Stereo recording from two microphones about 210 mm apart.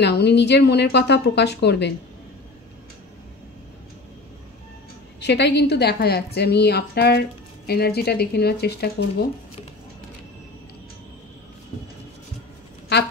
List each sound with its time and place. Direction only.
0.0 s a woman's voice: 55° left (ahead or behind)
5.2 s a woman's voice: 55° left (ahead or behind)
12.9 s a woman's voice: 50° left (ahead or behind)